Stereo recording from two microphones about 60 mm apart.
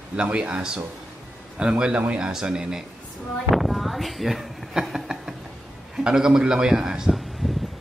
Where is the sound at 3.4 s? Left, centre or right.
Centre.